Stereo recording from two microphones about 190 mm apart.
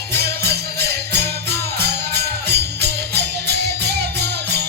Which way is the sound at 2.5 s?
60° right (ahead or behind).